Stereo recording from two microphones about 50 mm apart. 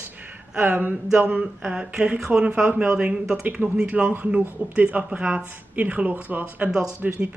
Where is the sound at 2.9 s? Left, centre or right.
Centre.